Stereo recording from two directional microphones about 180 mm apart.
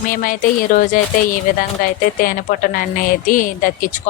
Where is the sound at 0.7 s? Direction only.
50° left (ahead or behind).